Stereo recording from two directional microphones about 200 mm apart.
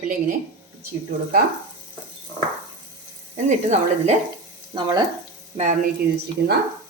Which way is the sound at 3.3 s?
35° right (ahead or behind).